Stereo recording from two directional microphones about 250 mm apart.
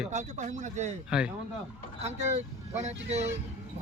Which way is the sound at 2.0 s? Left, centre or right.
Right.